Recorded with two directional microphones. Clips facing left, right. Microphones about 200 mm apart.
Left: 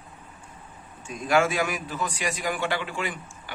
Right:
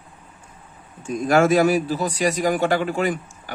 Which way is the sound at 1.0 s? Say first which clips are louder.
Right 6 dB; 40° right (ahead or behind).